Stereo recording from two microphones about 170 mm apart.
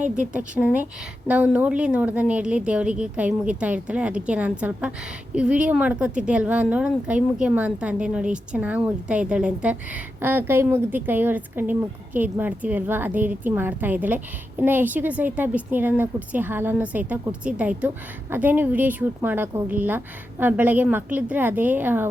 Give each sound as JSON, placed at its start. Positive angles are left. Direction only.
{"t": 0.0, "sound": "a woman's voice", "side_deg": -5}